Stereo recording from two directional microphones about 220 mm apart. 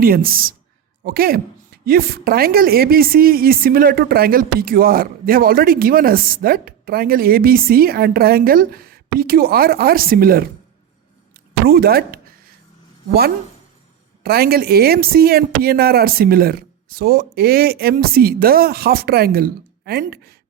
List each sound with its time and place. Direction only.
0.0 s a woman's voice: 40° right (ahead or behind)
11.6 s a sound: 45° right (ahead or behind)
14.3 s a woman's voice: 45° right (ahead or behind)